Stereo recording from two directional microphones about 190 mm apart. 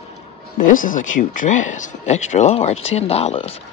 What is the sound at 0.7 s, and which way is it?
Speech, 45° left (ahead or behind).